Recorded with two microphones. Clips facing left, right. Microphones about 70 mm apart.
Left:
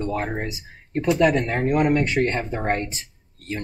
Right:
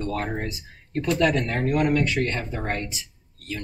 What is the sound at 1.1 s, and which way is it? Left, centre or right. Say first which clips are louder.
Speech: left 3 dB; centre.